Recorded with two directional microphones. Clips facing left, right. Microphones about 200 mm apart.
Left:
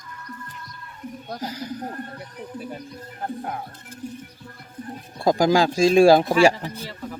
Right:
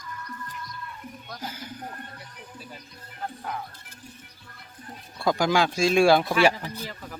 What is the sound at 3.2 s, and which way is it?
Music, 45° left (ahead or behind).